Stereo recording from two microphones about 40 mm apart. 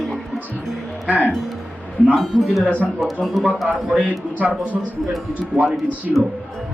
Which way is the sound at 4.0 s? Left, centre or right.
Right.